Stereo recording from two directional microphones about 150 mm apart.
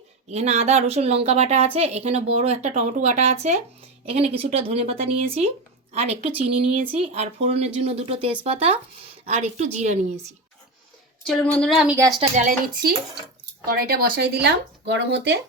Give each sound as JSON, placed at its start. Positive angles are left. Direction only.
{"t": 0.3, "sound": "a woman's voice", "side_deg": -45}
{"t": 11.3, "sound": "a woman's voice", "side_deg": 5}
{"t": 11.9, "sound": "a woman's voice", "side_deg": -20}
{"t": 12.4, "sound": "speech", "side_deg": -55}
{"t": 13.7, "sound": "a woman's voice", "side_deg": -90}